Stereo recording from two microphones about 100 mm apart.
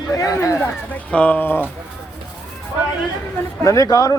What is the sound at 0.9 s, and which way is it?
Speech, 15° left (ahead or behind).